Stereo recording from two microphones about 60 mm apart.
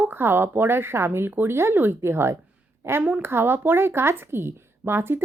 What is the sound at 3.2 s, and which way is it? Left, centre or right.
A woman's voice, right.